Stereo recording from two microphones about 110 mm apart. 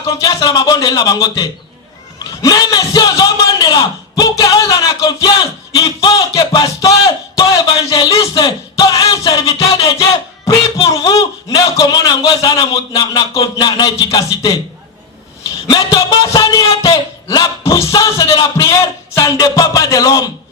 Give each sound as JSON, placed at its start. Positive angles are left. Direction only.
{"t": 0.2, "sound": "a man's voice", "side_deg": 30}
{"t": 9.2, "sound": "music", "side_deg": 30}
{"t": 11.8, "sound": "a man's voice", "side_deg": 35}
{"t": 15.6, "sound": "a man's voice", "side_deg": 40}